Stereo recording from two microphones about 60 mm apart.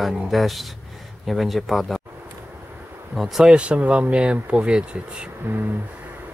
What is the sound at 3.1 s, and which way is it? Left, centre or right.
Speech, centre.